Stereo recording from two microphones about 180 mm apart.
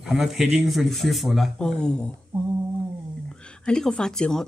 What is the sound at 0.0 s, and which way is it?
Speech, centre (ahead or behind).